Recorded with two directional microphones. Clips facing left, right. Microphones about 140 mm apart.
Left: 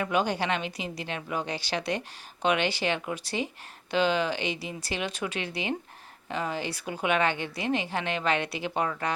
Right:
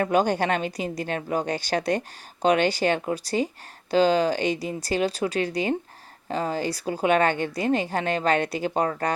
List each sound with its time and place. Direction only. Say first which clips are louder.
0.0 s a woman's voice: right 5 dB; 45° right (ahead or behind)